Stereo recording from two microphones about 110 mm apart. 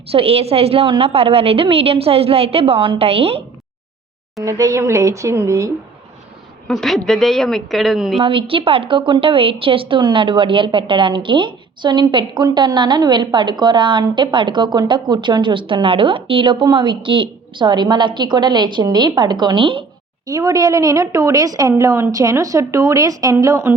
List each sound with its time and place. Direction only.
0.1 s a woman's voice: 65° right (ahead or behind)
4.4 s a woman's voice: 30° right (ahead or behind)
6.7 s a woman's voice: centre (ahead or behind)
8.2 s a woman's voice: 55° right (ahead or behind)
20.2 s a woman's voice: 35° right (ahead or behind)